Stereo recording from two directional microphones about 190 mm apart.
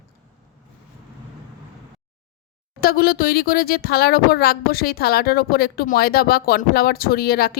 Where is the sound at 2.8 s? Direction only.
55° left (ahead or behind).